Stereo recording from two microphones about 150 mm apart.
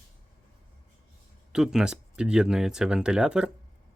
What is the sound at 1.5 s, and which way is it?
Speech, 5° right (ahead or behind).